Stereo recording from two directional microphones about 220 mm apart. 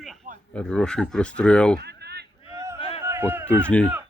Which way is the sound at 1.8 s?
50° right (ahead or behind).